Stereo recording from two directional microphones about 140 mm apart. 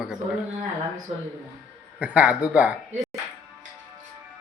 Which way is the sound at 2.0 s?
10° right (ahead or behind).